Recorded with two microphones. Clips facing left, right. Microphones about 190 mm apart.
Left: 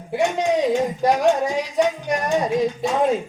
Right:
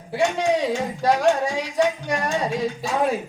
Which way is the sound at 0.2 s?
20° left (ahead or behind).